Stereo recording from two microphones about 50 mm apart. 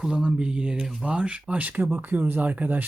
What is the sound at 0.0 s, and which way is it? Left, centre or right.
Speech, centre.